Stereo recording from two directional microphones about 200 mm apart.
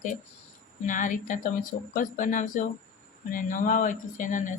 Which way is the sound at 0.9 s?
40° left (ahead or behind).